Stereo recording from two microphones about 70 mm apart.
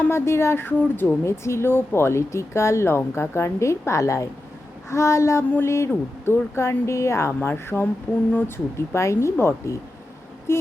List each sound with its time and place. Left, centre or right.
0.1 s speech: left
4.9 s child singing: left
5.6 s speech: left
8.5 s speech: left